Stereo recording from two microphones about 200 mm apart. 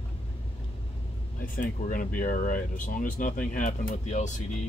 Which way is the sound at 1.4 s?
45° left (ahead or behind).